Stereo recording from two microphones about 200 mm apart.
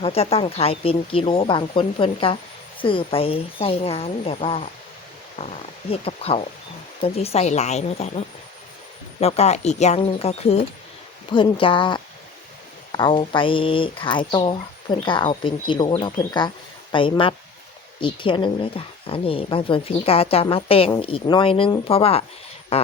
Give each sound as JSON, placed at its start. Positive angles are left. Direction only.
{"t": 0.0, "sound": "speech", "side_deg": 30}
{"t": 9.2, "sound": "speech", "side_deg": 30}